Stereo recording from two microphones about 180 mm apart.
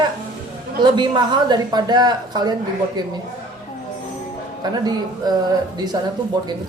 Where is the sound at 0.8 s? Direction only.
25° right (ahead or behind).